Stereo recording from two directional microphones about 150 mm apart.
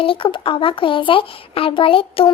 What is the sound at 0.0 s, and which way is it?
Speech, 35° left (ahead or behind).